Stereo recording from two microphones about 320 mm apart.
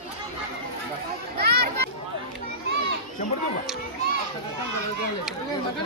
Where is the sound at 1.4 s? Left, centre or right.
Right.